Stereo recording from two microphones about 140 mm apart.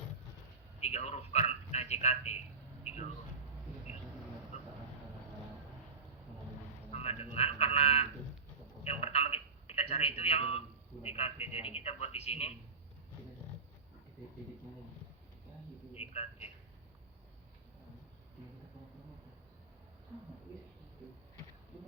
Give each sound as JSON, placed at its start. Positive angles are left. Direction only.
{"t": 0.8, "sound": "a man's voice", "side_deg": 50}
{"t": 4.5, "sound": "vehicle", "side_deg": 50}
{"t": 6.9, "sound": "a sound", "side_deg": 50}
{"t": 8.8, "sound": "telephone", "side_deg": 45}
{"t": 11.0, "sound": "speech", "side_deg": 45}
{"t": 16.0, "sound": "a sound", "side_deg": 45}